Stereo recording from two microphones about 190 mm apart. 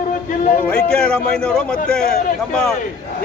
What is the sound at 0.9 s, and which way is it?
Speech, 5° left (ahead or behind).